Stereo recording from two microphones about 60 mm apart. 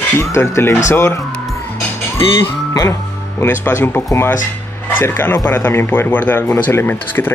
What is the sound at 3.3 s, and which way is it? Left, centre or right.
Speech, left.